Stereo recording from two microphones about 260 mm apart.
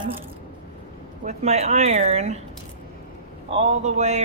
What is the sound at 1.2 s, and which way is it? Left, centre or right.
A woman's voice, right.